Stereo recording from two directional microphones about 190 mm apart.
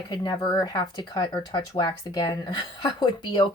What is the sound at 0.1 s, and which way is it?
Speech, 20° left (ahead or behind).